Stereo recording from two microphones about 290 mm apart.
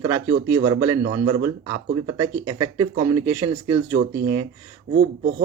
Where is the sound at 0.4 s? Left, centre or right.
Right.